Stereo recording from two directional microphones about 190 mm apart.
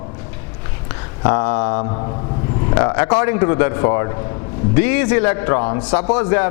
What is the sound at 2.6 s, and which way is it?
A man's voice, 15° left (ahead or behind).